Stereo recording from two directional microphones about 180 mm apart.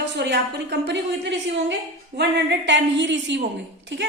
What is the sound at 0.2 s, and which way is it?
A woman's voice, 70° right (ahead or behind).